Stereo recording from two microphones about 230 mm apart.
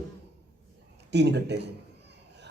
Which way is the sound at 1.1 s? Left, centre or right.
Right.